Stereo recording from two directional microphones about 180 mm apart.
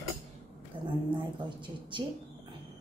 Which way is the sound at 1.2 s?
25° right (ahead or behind).